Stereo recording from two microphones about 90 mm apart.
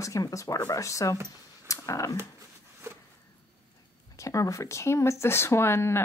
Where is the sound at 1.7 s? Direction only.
35° left (ahead or behind).